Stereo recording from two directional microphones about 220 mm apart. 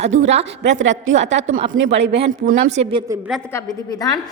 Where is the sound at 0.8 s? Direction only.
60° right (ahead or behind).